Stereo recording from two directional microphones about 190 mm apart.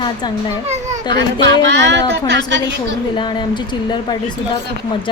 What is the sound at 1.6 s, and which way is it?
Speech, 70° right (ahead or behind).